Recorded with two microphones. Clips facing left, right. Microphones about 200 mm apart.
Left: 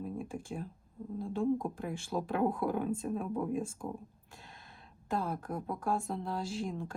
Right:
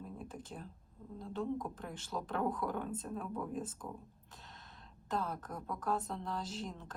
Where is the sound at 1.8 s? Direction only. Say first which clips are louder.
Left 6 dB; 10° left (ahead or behind).